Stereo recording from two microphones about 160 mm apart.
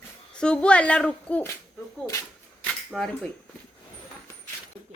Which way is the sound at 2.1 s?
20° left (ahead or behind).